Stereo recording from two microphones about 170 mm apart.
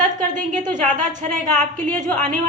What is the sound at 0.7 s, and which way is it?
A woman's voice, 45° right (ahead or behind).